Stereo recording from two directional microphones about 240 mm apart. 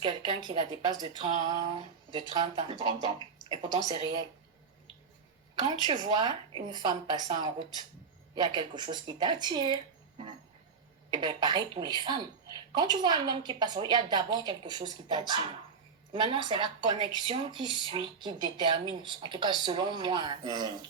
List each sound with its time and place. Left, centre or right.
0.0 s speech: centre
5.6 s a woman's voice: centre